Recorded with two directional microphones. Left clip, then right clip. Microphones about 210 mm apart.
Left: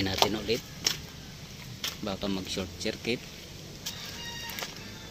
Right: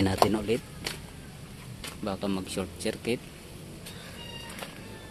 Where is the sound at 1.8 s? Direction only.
10° right (ahead or behind).